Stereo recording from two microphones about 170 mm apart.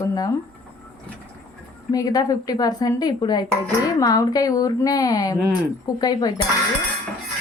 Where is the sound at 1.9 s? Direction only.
20° left (ahead or behind).